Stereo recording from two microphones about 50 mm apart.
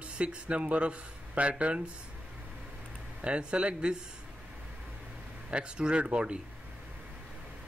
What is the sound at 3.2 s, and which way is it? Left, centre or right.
Speech, right.